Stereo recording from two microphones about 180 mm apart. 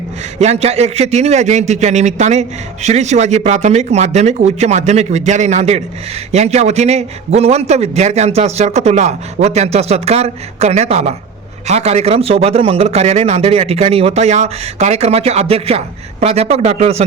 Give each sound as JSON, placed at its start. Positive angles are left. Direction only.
{"t": 0.3, "sound": "a man's voice", "side_deg": -35}